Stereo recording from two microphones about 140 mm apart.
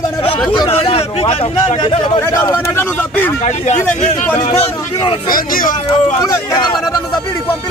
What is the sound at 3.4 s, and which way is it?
Speech, 55° left (ahead or behind).